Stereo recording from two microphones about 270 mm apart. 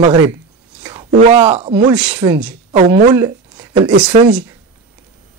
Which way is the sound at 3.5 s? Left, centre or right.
Centre.